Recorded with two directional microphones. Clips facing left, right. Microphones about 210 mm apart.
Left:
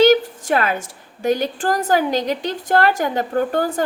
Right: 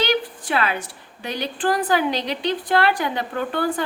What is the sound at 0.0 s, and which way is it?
A woman's voice, 45° left (ahead or behind).